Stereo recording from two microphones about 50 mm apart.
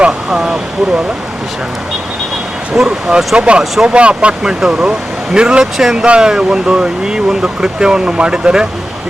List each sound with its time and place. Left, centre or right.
0.0 s a sound: centre
2.7 s speech: centre
5.7 s speech: centre